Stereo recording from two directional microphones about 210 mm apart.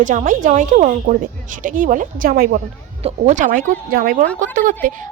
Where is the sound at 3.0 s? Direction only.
35° right (ahead or behind).